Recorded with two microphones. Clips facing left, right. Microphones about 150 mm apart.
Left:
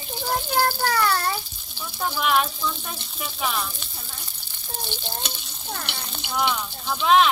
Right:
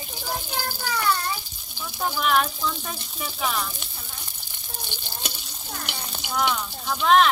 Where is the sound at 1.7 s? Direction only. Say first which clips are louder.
Even; 10° right (ahead or behind).